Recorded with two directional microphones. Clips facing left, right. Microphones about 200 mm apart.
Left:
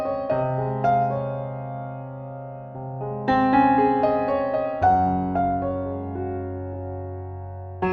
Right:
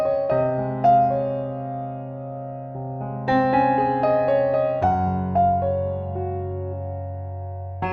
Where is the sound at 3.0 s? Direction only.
Centre (ahead or behind).